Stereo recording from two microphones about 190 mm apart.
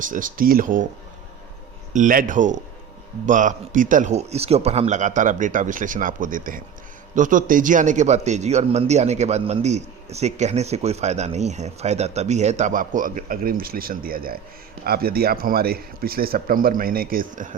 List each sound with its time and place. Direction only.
0.0 s a man's voice: 45° right (ahead or behind)
1.9 s a man's voice: 45° right (ahead or behind)